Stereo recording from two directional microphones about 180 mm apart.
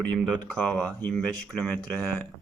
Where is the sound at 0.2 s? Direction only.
5° left (ahead or behind).